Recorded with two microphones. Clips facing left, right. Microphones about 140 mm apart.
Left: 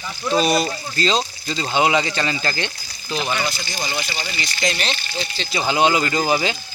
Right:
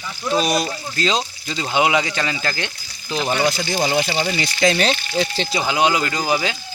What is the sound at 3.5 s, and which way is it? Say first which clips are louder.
Speech: right 7 dB; 85° right.